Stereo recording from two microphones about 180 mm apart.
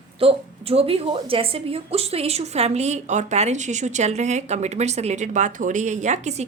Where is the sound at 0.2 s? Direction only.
30° right (ahead or behind).